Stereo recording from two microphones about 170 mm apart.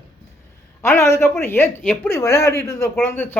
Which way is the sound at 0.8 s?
15° left (ahead or behind).